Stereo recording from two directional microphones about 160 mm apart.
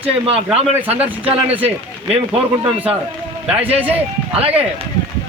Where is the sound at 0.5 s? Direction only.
10° right (ahead or behind).